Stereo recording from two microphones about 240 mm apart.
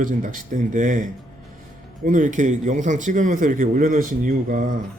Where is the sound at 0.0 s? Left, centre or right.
Right.